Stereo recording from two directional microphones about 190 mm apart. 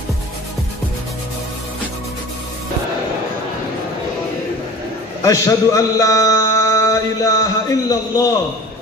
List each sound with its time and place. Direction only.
5.2 s a man's voice: 15° left (ahead or behind)